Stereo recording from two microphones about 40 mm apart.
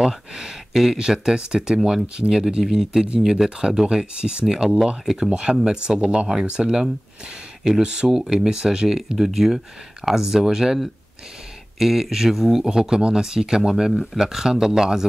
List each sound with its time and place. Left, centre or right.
0.0 s speech: centre
4.5 s speech: centre
8.1 s speech: centre
11.8 s speech: centre
12.6 s speech: centre